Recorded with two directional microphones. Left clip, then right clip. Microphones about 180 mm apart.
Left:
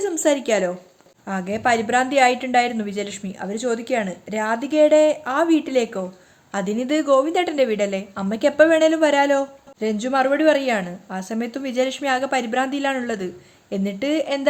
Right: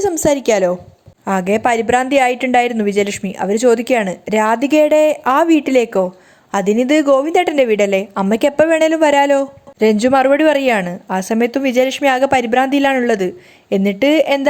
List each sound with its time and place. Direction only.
0.0 s a woman's voice: 30° right (ahead or behind)